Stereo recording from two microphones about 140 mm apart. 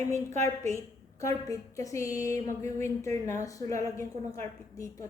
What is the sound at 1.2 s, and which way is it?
Speech, 25° left (ahead or behind).